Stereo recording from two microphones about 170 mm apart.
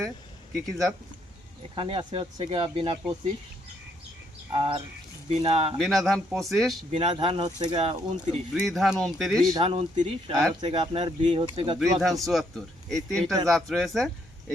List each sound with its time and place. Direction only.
0.6 s speech: centre (ahead or behind)
1.7 s speech: 30° right (ahead or behind)
4.5 s speech: 30° right (ahead or behind)
5.7 s speech: centre (ahead or behind)
6.9 s speech: 35° right (ahead or behind)
8.5 s speech: centre (ahead or behind)
9.5 s speech: 35° right (ahead or behind)
11.8 s speech: centre (ahead or behind)